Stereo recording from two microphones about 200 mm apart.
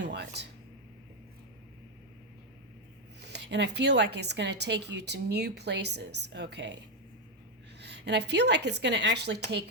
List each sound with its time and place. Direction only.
0.0 s a sound: 55° right (ahead or behind)
3.2 s a woman's voice: 60° right (ahead or behind)
7.8 s a woman's voice: 55° right (ahead or behind)